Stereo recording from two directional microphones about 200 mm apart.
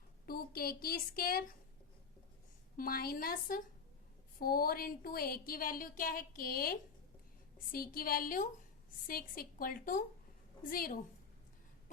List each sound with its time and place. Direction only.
0.3 s speech: 50° left (ahead or behind)
2.7 s speech: 45° left (ahead or behind)